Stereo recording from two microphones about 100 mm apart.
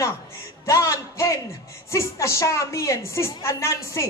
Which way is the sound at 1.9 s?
30° left (ahead or behind).